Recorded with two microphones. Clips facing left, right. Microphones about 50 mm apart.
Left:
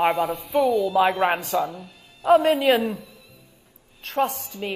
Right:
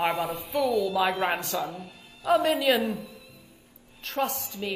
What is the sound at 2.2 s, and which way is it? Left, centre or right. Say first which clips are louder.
Speech: left 7 dB; left.